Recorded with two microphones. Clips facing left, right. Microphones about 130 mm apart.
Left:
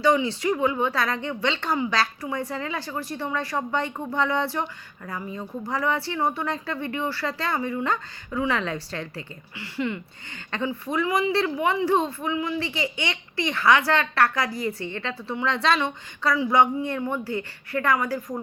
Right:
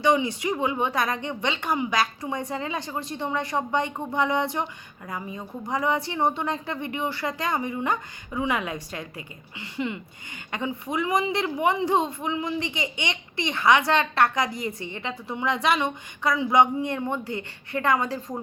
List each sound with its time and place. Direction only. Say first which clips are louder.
0.0 s a woman's voice: left 1 dB; 20° right (ahead or behind)